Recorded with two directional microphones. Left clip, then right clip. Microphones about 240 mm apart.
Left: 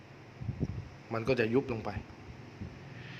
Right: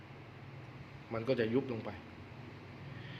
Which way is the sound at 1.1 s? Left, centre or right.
Left.